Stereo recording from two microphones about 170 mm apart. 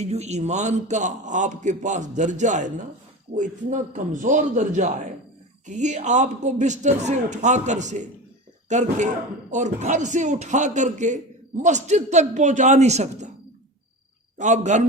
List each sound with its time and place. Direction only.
0.0 s speech: 40° right (ahead or behind)
14.3 s speech: 45° right (ahead or behind)